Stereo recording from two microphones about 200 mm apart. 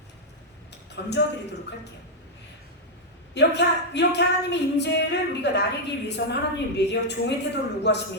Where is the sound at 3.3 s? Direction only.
60° left (ahead or behind).